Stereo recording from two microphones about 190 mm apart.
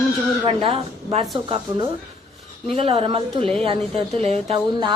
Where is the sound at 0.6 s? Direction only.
30° right (ahead or behind).